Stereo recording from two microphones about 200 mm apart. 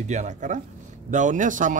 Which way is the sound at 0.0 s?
35° right (ahead or behind).